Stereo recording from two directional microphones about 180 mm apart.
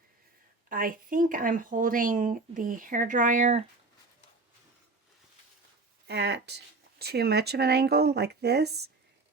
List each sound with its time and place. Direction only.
0.7 s speech: 50° right (ahead or behind)
6.1 s speech: 70° right (ahead or behind)